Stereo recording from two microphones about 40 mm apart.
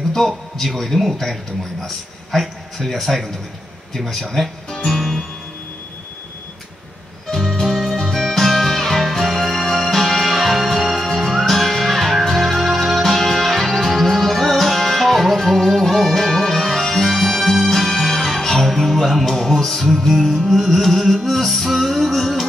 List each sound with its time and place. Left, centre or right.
0.6 s speech: centre
4.1 s guitar: centre
7.3 s music: centre
7.6 s music: centre